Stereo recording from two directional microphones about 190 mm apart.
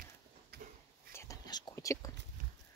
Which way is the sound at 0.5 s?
55° right (ahead or behind).